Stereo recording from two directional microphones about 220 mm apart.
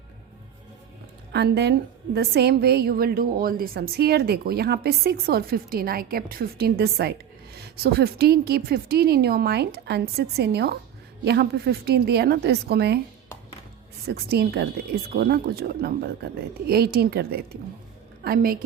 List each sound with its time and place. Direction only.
1.3 s a woman's voice: 50° right (ahead or behind)
14.0 s a woman's voice: 45° right (ahead or behind)